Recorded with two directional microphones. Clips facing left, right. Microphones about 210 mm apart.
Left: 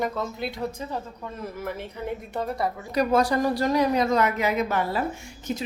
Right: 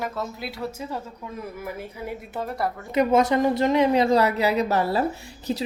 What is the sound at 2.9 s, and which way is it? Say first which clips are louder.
A woman's voice: right 3 dB; 25° right (ahead or behind).